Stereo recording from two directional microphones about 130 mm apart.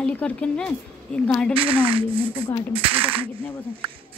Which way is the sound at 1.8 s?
45° right (ahead or behind).